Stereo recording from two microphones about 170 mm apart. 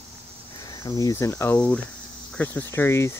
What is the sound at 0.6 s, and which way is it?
Speech, 20° left (ahead or behind).